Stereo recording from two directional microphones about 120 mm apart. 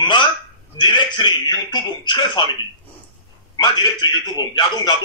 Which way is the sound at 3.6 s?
35° left (ahead or behind).